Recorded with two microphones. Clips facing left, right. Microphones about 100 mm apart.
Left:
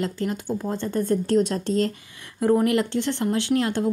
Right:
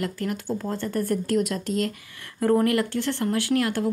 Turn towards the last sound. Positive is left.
turn(degrees=25)  # may be behind; listen again after turning